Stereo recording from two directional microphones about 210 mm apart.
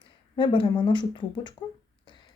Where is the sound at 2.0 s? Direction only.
20° left (ahead or behind).